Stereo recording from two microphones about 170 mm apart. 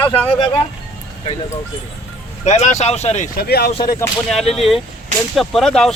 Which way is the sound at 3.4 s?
65° left (ahead or behind).